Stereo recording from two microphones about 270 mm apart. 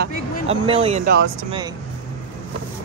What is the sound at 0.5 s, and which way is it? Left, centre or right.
Speech, right.